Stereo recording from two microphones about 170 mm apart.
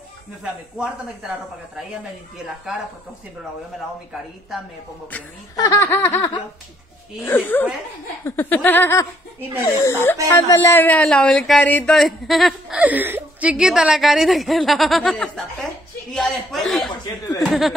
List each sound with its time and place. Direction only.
0.4 s speech: 5° right (ahead or behind)
5.6 s laughter: 20° left (ahead or behind)
7.2 s speech: 10° left (ahead or behind)
16.9 s laughter: 25° left (ahead or behind)
17.5 s speech: centre (ahead or behind)